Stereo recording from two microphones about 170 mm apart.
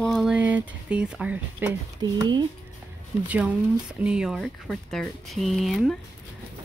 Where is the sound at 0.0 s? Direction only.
Centre (ahead or behind).